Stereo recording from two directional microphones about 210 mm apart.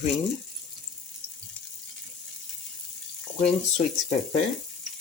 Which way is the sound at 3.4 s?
30° left (ahead or behind).